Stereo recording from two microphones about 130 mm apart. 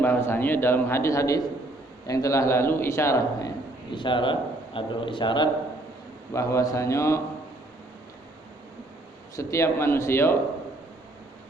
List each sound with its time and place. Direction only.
0.0 s a man's voice: 15° left (ahead or behind)
3.9 s a man's voice: 40° left (ahead or behind)
6.3 s a man's voice: 25° left (ahead or behind)
9.3 s a man's voice: 25° left (ahead or behind)